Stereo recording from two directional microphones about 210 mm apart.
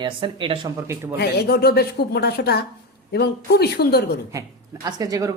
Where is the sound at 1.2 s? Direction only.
50° left (ahead or behind).